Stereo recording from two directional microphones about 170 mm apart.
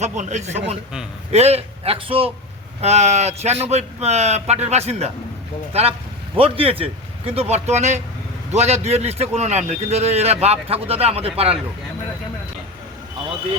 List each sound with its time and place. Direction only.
0.0 s a man's voice: 45° right (ahead or behind)